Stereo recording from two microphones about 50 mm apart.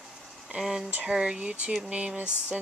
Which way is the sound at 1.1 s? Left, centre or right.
Centre.